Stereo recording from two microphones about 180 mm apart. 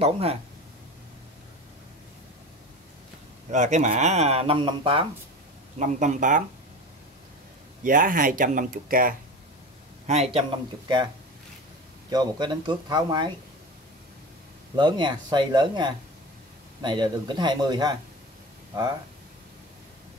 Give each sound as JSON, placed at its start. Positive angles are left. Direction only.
{"t": 0.0, "sound": "speech", "side_deg": -35}
{"t": 3.5, "sound": "speech", "side_deg": -40}
{"t": 5.8, "sound": "speech", "side_deg": -45}
{"t": 7.8, "sound": "speech", "side_deg": -50}
{"t": 10.0, "sound": "speech", "side_deg": -35}
{"t": 12.1, "sound": "speech", "side_deg": -25}
{"t": 14.8, "sound": "speech", "side_deg": -25}